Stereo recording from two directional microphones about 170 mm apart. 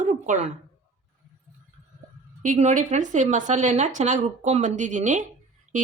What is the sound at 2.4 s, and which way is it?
Speech, 45° right (ahead or behind).